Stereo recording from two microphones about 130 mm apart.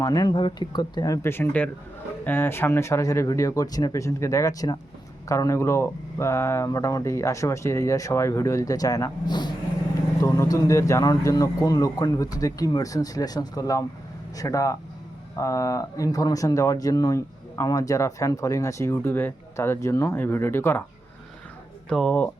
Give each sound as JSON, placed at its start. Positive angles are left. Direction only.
{"t": 0.0, "sound": "speech", "side_deg": 30}
{"t": 1.2, "sound": "speech", "side_deg": 15}
{"t": 10.2, "sound": "speech", "side_deg": 20}
{"t": 21.8, "sound": "speech", "side_deg": 5}